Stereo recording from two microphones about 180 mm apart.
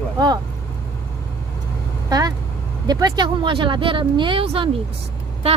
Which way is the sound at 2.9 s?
25° right (ahead or behind).